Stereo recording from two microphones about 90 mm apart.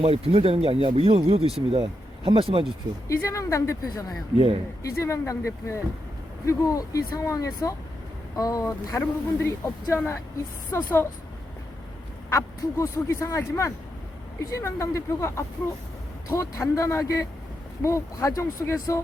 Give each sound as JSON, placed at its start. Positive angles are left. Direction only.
{"t": 0.1, "sound": "speech", "side_deg": -90}
{"t": 3.1, "sound": "speech", "side_deg": 35}
{"t": 9.0, "sound": "speech", "side_deg": 30}
{"t": 12.3, "sound": "speech", "side_deg": 30}